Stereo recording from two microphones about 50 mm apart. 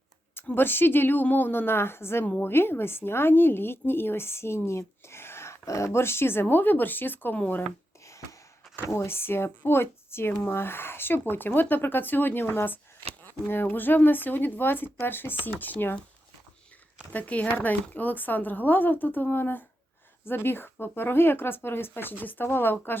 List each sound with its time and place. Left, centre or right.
0.5 s a woman's voice: left
8.0 s a sound: left
8.9 s a woman's voice: left
17.1 s a woman's voice: left